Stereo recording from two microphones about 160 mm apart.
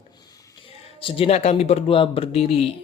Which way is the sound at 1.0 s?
35° left (ahead or behind).